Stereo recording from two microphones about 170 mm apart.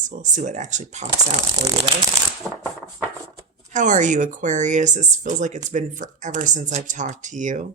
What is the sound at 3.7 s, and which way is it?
Speech, 45° right (ahead or behind).